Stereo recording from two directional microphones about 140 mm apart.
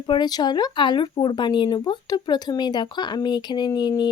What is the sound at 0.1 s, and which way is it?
Speech, 30° left (ahead or behind).